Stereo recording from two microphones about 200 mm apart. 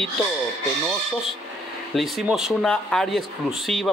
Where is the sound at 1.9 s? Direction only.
Centre (ahead or behind).